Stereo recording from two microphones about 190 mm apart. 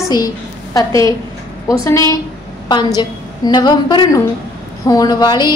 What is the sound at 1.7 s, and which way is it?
A woman's voice, 15° left (ahead or behind).